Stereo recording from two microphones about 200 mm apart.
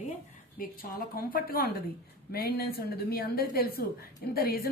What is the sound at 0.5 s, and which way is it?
A woman's voice, 45° left (ahead or behind).